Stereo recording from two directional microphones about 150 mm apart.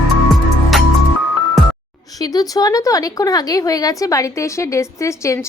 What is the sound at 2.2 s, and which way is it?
A woman's voice, 25° left (ahead or behind).